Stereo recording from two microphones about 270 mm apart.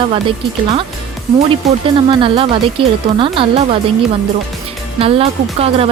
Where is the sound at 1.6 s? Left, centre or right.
Centre.